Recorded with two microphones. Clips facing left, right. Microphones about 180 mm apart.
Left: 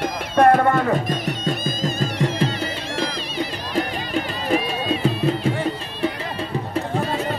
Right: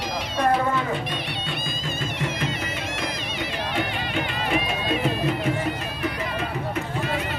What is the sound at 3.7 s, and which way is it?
Music, 40° left (ahead or behind).